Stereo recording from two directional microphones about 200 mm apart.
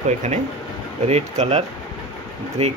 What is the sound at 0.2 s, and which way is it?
Speech, 35° right (ahead or behind).